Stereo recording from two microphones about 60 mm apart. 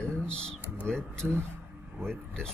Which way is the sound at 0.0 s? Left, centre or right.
Centre.